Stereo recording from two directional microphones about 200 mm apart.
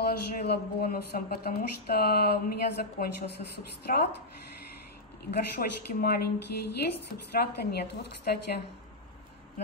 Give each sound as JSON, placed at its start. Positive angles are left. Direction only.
{"t": 0.0, "sound": "a woman's voice", "side_deg": 50}
{"t": 5.3, "sound": "a woman's voice", "side_deg": 50}